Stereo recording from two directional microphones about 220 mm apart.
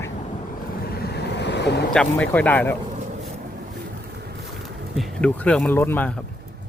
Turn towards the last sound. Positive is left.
turn(degrees=10)  # may be behind; listen again after turning